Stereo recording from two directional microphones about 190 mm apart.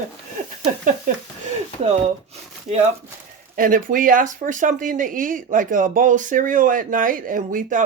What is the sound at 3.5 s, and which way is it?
Speech, 45° right (ahead or behind).